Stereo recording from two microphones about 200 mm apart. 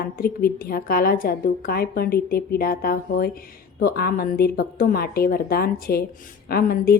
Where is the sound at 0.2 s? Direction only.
50° left (ahead or behind).